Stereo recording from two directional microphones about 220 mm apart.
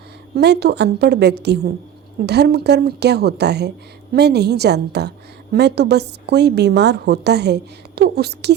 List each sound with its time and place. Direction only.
0.3 s a woman's voice: 50° right (ahead or behind)